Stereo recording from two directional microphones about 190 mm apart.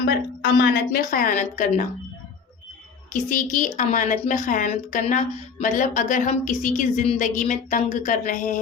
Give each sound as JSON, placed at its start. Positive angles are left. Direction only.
{"t": 0.0, "sound": "a woman's voice", "side_deg": 60}
{"t": 3.1, "sound": "a woman's voice", "side_deg": 45}